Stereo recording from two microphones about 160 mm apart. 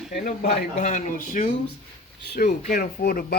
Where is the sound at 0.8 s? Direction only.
50° left (ahead or behind); by 3.3 s 65° left (ahead or behind).